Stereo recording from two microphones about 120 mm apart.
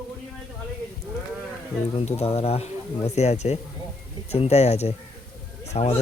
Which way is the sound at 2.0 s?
60° left (ahead or behind).